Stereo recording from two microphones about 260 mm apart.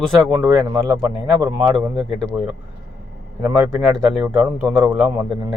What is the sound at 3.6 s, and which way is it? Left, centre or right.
Speech, centre.